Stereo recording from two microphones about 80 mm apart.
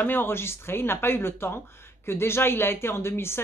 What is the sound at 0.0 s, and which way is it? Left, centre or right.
Speech, left.